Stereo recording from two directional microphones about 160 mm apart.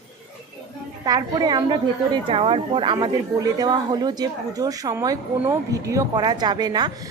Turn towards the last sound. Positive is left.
turn(degrees=-25)  # may be behind; listen again after turning